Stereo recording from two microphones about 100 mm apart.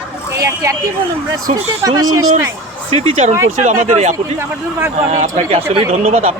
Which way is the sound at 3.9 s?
90° right.